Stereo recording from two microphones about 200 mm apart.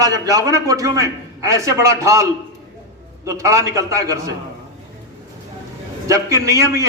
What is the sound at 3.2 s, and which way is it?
A man's voice, 15° right (ahead or behind).